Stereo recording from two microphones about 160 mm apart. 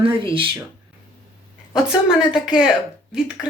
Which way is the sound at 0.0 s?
35° right (ahead or behind).